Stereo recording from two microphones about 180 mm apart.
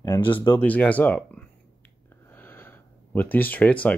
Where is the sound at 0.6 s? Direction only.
10° left (ahead or behind).